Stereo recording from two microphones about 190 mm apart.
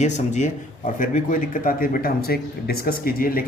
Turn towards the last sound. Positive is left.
turn(degrees=50)  # may be behind; listen again after turning